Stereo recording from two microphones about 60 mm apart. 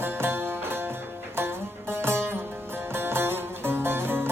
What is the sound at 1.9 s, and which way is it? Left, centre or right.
Music, right.